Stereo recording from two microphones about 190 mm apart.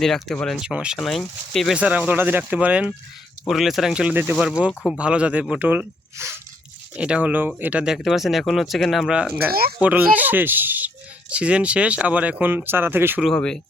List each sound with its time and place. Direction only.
0.0 s speech: centre (ahead or behind)
9.5 s speech: 55° right (ahead or behind)
9.7 s speech: 10° right (ahead or behind)
13.3 s speech: 5° left (ahead or behind)